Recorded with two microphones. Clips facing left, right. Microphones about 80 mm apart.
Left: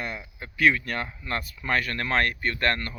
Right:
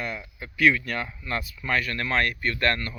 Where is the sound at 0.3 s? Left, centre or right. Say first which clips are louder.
Right 1 dB; left.